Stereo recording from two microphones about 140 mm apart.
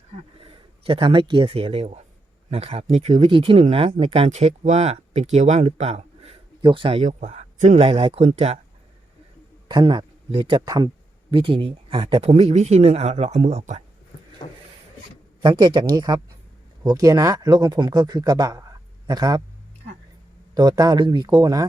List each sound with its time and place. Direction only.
0.4 s speech: 40° right (ahead or behind)
6.6 s speech: 35° right (ahead or behind)
7.1 s speech: 55° right (ahead or behind)
9.6 s speech: 30° right (ahead or behind)
12.3 s speech: 50° right (ahead or behind)
14.4 s a sound: 40° left (ahead or behind)
15.4 s speech: 30° right (ahead or behind)
20.6 s speech: 30° right (ahead or behind)